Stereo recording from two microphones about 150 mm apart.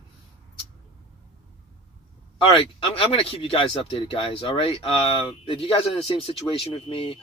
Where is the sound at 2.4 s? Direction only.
35° left (ahead or behind).